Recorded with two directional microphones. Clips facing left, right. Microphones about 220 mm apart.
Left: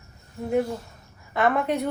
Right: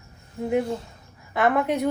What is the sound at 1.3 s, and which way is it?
Speech, 15° right (ahead or behind).